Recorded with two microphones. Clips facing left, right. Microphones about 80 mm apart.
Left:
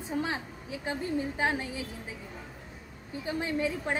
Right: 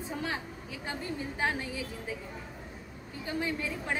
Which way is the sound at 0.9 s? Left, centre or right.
Left.